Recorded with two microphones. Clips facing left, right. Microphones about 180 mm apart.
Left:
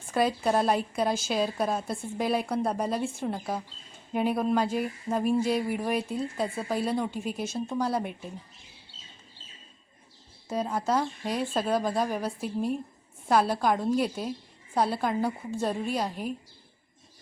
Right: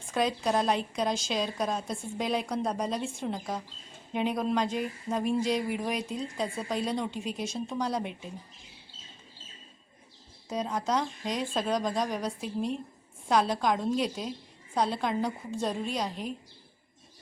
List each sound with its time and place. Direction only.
0.1 s a woman's voice: 5° left (ahead or behind)
10.5 s a woman's voice: 5° left (ahead or behind)